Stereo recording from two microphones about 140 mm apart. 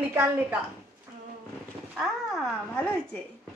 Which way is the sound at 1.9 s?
Centre (ahead or behind).